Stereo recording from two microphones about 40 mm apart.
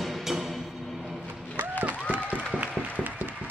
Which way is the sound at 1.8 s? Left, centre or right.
Right.